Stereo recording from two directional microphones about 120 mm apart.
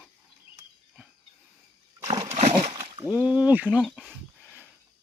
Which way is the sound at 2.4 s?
65° right (ahead or behind).